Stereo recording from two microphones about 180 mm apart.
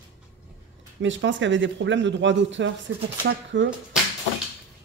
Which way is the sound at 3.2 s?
75° right (ahead or behind).